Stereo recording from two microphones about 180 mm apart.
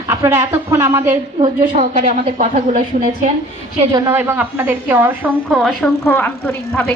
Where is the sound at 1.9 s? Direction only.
45° right (ahead or behind).